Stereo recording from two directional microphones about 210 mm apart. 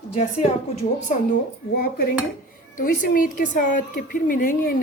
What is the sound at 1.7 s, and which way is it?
A woman's voice, 45° left (ahead or behind).